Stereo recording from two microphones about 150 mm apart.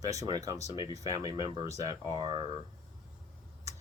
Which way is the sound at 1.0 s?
25° right (ahead or behind).